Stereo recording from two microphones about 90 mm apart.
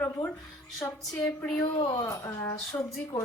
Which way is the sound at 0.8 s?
30° left (ahead or behind).